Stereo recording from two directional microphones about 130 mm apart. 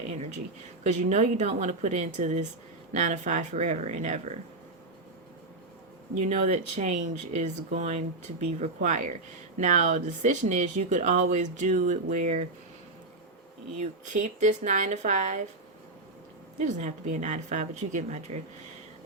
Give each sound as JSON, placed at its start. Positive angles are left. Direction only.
{"t": 0.9, "sound": "speech", "side_deg": -60}
{"t": 6.1, "sound": "speech", "side_deg": -65}
{"t": 8.6, "sound": "speech", "side_deg": -75}
{"t": 14.0, "sound": "speech", "side_deg": -75}
{"t": 16.6, "sound": "speech", "side_deg": -65}